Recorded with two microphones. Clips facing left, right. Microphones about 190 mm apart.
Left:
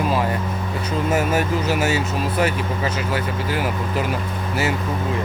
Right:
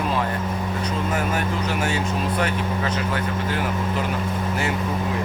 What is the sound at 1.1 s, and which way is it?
Speech, 5° left (ahead or behind).